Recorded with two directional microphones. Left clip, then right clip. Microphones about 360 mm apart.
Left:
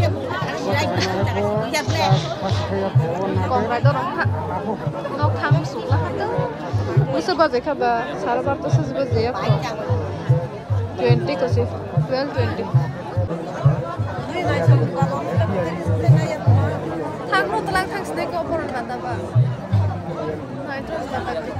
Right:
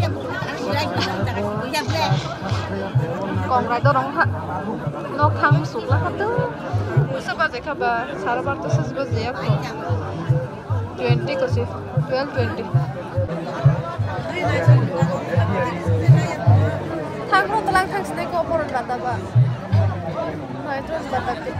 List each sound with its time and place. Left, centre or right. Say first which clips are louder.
1.7 s music: left 2 dB; centre
3.4 s speech: right 3 dB; centre
7.2 s speech: left 6 dB; centre
11.0 s speech: left 2 dB; centre
14.5 s music: left 2 dB; left
17.3 s chatter: right 3 dB; centre